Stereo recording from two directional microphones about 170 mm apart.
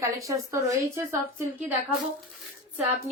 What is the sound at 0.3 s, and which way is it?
Speech, 20° right (ahead or behind).